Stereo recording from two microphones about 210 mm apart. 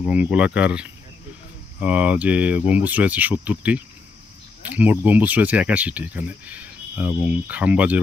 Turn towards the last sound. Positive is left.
turn(degrees=-5)  # may be behind; listen again after turning